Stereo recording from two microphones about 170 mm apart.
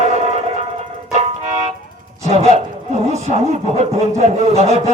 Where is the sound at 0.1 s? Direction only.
45° right (ahead or behind).